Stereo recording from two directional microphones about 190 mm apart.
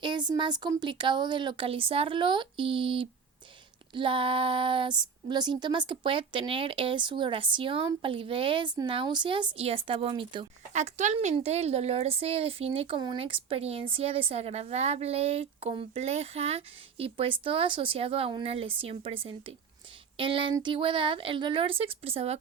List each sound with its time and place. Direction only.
0.0 s speech: 25° right (ahead or behind)
10.7 s a woman's voice: 40° right (ahead or behind)